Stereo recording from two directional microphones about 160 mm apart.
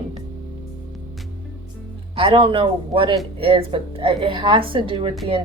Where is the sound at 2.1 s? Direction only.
35° right (ahead or behind).